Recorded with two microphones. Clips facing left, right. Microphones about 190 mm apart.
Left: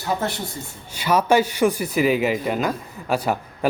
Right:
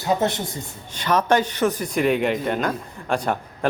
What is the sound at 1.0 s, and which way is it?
Speech, 10° left (ahead or behind).